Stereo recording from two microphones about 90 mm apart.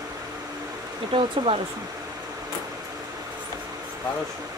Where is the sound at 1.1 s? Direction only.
90° right.